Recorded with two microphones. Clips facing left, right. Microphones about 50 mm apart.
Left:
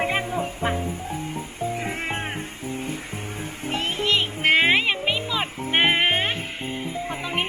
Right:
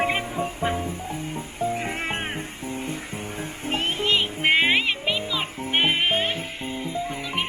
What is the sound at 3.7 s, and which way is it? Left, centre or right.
Vehicle, right.